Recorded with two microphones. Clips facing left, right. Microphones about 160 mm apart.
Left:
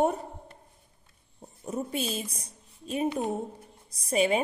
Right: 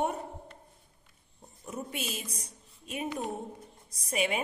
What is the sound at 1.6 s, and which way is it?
A woman's voice, 35° left (ahead or behind).